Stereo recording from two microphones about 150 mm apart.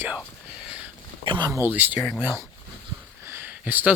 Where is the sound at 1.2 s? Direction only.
30° right (ahead or behind); by 2.0 s 10° right (ahead or behind).